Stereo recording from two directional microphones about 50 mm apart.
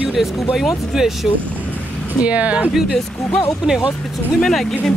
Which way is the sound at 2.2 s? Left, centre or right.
Right.